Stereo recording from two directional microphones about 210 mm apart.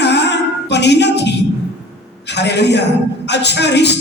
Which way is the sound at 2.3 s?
55° left (ahead or behind).